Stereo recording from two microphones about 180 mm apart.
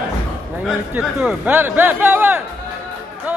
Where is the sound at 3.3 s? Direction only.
10° right (ahead or behind).